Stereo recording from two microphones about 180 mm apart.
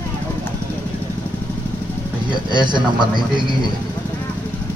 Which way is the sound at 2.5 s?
25° right (ahead or behind).